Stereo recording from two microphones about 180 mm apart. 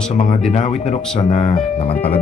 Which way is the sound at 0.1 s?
40° left (ahead or behind).